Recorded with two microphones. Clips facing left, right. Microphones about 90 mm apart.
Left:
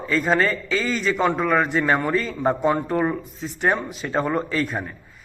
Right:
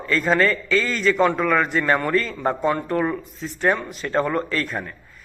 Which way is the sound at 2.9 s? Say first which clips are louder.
Even; 20° left (ahead or behind).